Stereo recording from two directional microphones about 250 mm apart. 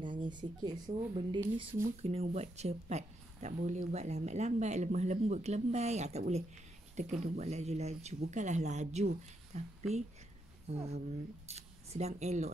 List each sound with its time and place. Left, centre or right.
0.0 s speech: centre
10.7 s speech: right